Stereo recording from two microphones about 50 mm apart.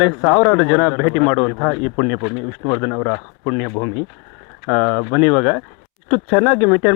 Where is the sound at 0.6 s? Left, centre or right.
Centre.